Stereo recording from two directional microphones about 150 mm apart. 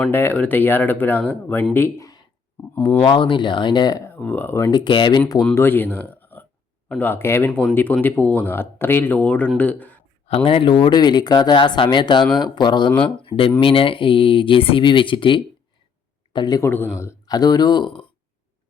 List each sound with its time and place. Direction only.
0.1 s speech: 15° left (ahead or behind)
3.0 s speech: 35° left (ahead or behind); by 4.7 s 15° left (ahead or behind)
4.7 s speech: 30° left (ahead or behind)
5.5 s speech: 15° left (ahead or behind)
10.2 s speech: 40° left (ahead or behind)
16.6 s speech: 15° left (ahead or behind); by 18.0 s 30° left (ahead or behind)